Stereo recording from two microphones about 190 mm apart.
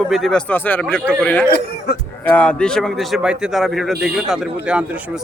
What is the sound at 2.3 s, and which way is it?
A man's voice, 5° left (ahead or behind).